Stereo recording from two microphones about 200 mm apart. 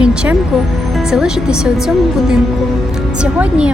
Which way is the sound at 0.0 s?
5° right (ahead or behind).